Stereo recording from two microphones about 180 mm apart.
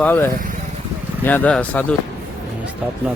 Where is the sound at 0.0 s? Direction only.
10° left (ahead or behind).